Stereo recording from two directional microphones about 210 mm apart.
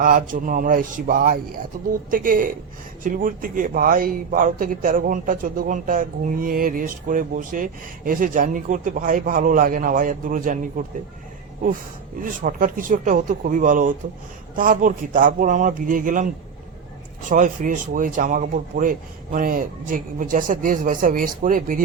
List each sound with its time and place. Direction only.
0.0 s speech: 40° right (ahead or behind)
12.2 s speech: 40° right (ahead or behind)
17.2 s speech: 40° right (ahead or behind)